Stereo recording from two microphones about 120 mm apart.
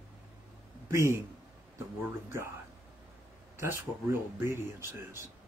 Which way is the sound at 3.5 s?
25° right (ahead or behind).